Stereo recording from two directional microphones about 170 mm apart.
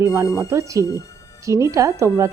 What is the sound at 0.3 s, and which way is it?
A woman's voice, 20° right (ahead or behind).